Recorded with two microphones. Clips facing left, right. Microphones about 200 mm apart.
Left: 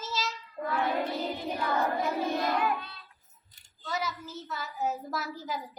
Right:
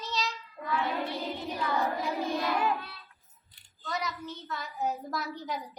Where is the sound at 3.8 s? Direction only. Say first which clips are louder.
Left 1 dB; centre (ahead or behind).